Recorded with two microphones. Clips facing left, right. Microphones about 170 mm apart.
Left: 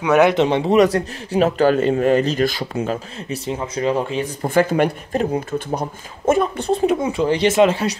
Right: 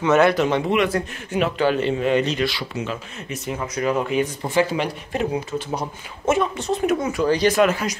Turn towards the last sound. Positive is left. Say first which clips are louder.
# left 3 dB
turn(degrees=30)  # may be behind; listen again after turning